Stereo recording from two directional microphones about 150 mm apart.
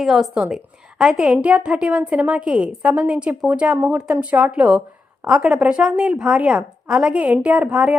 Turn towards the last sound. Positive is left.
turn(degrees=-10)  # may be behind; listen again after turning